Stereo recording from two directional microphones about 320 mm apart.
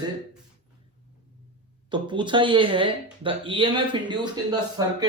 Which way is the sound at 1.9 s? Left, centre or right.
Centre.